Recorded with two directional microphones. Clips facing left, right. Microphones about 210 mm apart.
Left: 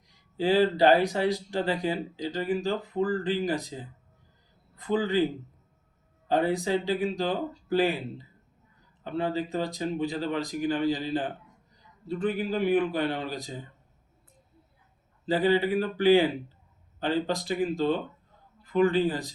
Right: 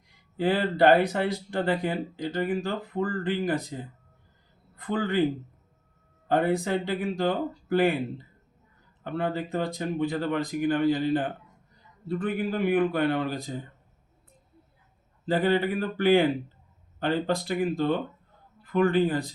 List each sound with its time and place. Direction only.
0.3 s speech: 55° right (ahead or behind)
4.8 s speech: 55° right (ahead or behind)
6.2 s speech: 55° right (ahead or behind)
15.3 s speech: 55° right (ahead or behind)